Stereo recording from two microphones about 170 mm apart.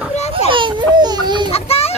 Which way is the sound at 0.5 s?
30° right (ahead or behind).